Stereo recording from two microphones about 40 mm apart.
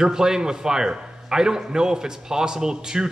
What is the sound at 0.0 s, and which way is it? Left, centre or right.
A man's voice, centre.